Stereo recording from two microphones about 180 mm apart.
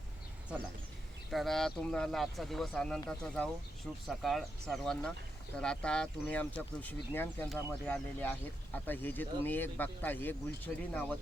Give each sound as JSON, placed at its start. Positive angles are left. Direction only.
{"t": 1.3, "sound": "speech", "side_deg": 0}